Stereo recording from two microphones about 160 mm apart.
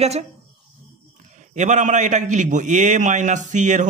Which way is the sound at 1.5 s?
50° right (ahead or behind).